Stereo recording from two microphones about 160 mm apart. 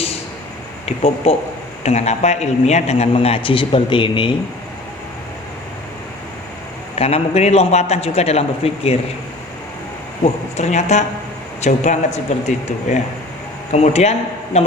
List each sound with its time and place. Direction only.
0.9 s a man's voice: 40° left (ahead or behind)
7.0 s a man's voice: 40° left (ahead or behind)
10.2 s a man's voice: 45° left (ahead or behind)